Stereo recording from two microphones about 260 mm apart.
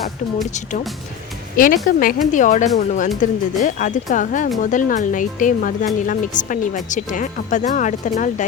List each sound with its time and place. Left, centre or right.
1.5 s speech: left